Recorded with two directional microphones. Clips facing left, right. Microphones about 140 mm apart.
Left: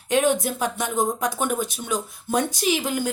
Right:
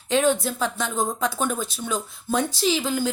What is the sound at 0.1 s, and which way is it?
Speech, 15° left (ahead or behind).